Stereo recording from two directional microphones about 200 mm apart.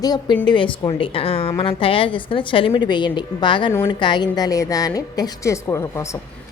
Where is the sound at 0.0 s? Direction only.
20° left (ahead or behind).